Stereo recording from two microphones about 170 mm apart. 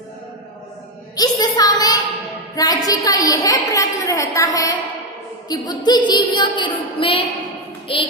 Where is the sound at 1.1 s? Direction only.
20° left (ahead or behind).